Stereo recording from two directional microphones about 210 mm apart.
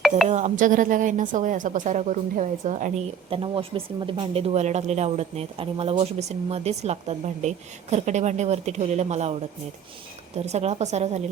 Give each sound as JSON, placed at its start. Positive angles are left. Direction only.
{"t": 0.3, "sound": "a woman's voice", "side_deg": -35}
{"t": 10.4, "sound": "a woman's voice", "side_deg": -30}